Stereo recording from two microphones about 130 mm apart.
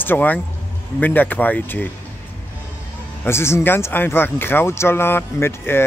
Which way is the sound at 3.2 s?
20° left (ahead or behind).